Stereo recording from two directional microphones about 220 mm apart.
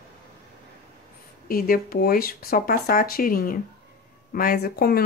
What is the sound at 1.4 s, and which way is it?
Speech, 40° left (ahead or behind).